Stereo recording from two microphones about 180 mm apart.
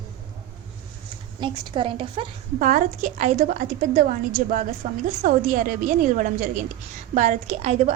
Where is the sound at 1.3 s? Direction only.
25° right (ahead or behind).